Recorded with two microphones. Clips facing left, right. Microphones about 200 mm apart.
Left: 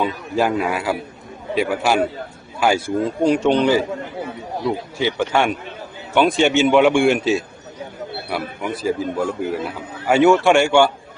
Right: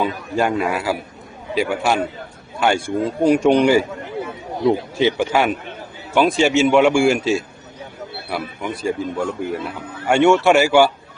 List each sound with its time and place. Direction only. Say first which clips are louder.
0.0 s a man's voice: even; centre (ahead or behind); by 5.1 s 20° right (ahead or behind)
5.1 s a man's voice: right 1 dB; 5° right (ahead or behind)